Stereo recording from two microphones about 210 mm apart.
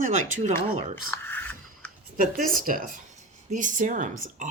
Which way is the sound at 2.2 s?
40° right (ahead or behind).